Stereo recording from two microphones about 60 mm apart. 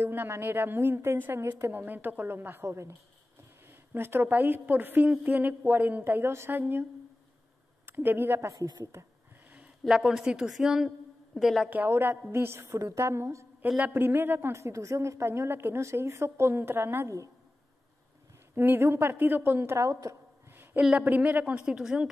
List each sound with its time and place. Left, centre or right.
0.0 s a woman's voice: right
2.6 s a woman's voice: right
3.6 s a woman's voice: right
8.5 s a woman's voice: right
9.8 s a woman's voice: centre
11.9 s a woman's voice: right
13.7 s speech: right
13.9 s a woman's voice: right
14.5 s a woman's voice: right
15.8 s a woman's voice: right
18.5 s a woman's voice: right
21.0 s speech: right
21.6 s a woman's voice: centre